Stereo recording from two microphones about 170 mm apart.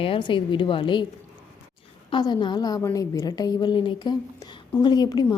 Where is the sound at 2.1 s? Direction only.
25° left (ahead or behind).